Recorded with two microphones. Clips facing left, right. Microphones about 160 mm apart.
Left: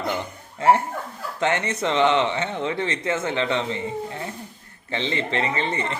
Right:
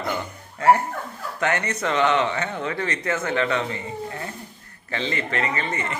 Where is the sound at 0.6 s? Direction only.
25° left (ahead or behind).